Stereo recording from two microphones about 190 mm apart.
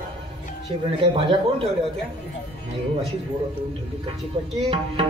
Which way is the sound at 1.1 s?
25° right (ahead or behind).